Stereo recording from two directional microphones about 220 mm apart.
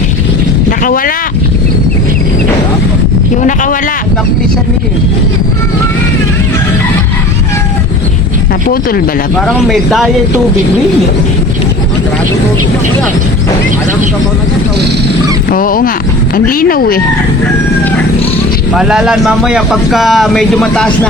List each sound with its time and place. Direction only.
0.9 s speech: 40° left (ahead or behind)
3.4 s speech: 35° left (ahead or behind)
9.5 s speech: centre (ahead or behind)
15.4 s speech: 40° left (ahead or behind)
18.7 s speech: centre (ahead or behind)